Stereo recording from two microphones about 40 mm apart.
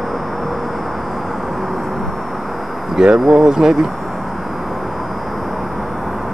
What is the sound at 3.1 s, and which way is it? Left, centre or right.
Speech, centre.